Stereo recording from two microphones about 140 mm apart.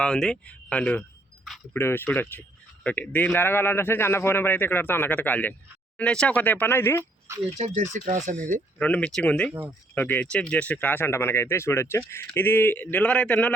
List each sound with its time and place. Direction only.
0.0 s speech: 5° left (ahead or behind)
7.5 s speech: 60° right (ahead or behind)
8.8 s speech: 10° left (ahead or behind)